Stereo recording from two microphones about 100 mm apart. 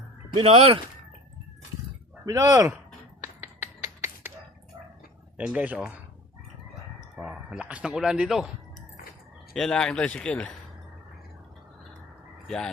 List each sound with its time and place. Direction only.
0.3 s speech: 80° right
2.2 s speech: 35° right (ahead or behind)
3.4 s finger snapping: 25° right (ahead or behind)
5.5 s speech: 15° right (ahead or behind)
7.2 s speech: 10° right (ahead or behind)
9.6 s speech: 5° left (ahead or behind)
12.5 s speech: 5° left (ahead or behind)